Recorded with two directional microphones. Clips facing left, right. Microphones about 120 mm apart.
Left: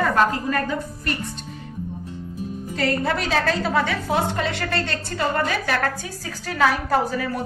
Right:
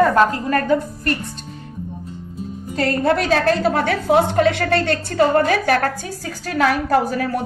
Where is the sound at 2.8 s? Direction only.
50° right (ahead or behind).